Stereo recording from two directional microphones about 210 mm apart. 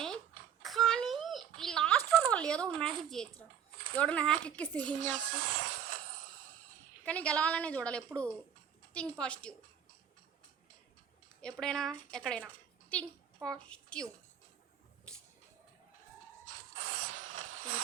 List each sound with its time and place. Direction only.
0.6 s a sound: centre (ahead or behind)
3.9 s a woman's voice: 5° left (ahead or behind)
4.9 s speech: 35° right (ahead or behind)
5.5 s music: 75° right (ahead or behind)
7.0 s a woman's voice: 5° left (ahead or behind)
11.6 s a woman's voice: 5° left (ahead or behind)
16.9 s a sound: 75° right (ahead or behind)